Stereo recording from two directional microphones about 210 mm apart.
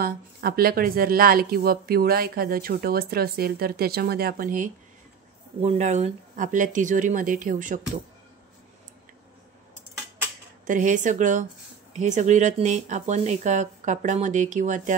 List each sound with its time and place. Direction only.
0.0 s speech: 45° right (ahead or behind)
5.6 s speech: 30° right (ahead or behind)
10.7 s speech: 35° right (ahead or behind)